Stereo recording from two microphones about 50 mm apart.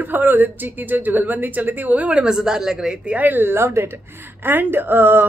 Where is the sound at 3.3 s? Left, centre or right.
Right.